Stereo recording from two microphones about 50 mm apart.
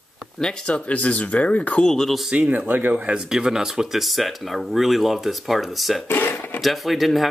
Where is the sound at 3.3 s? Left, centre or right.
Centre.